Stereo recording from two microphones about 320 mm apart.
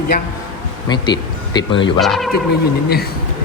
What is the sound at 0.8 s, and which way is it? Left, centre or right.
Speech, centre.